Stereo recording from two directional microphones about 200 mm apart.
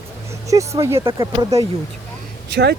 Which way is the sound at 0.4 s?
15° right (ahead or behind).